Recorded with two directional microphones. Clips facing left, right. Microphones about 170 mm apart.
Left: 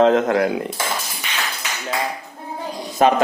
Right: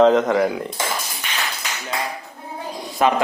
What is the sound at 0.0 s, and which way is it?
Speech, centre (ahead or behind).